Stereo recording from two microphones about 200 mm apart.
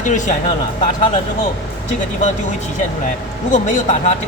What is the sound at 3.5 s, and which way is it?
Speech, 35° left (ahead or behind).